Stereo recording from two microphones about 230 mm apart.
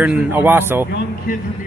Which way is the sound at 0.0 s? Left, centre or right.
Centre.